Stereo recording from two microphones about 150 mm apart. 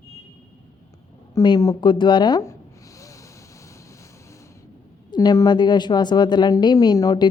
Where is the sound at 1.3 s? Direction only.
25° left (ahead or behind).